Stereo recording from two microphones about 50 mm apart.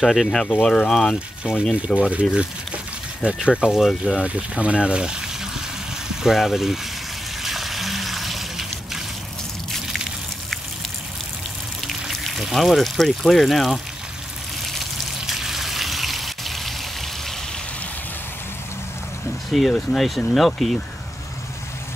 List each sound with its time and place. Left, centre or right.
0.0 s speech: centre
0.5 s speech: centre
2.0 s speech: right
3.6 s speech: centre
4.2 s speech: right
6.2 s speech: centre
7.4 s water: centre
11.9 s speech: centre
15.2 s water: centre
19.5 s speech: centre